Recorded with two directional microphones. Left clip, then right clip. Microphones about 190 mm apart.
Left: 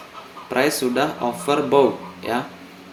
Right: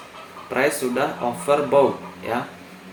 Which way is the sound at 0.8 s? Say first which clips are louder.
Left 2 dB; 50° left (ahead or behind).